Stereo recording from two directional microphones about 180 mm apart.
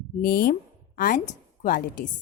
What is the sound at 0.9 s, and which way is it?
Speech, 50° left (ahead or behind).